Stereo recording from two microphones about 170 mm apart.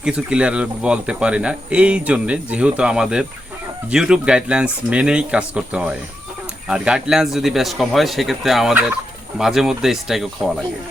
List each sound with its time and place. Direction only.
0.0 s speech: 5° right (ahead or behind)